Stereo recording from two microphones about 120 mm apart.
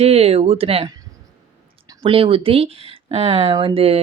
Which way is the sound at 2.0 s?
50° right (ahead or behind).